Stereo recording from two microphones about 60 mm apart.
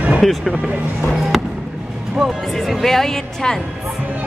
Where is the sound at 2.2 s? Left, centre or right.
Centre.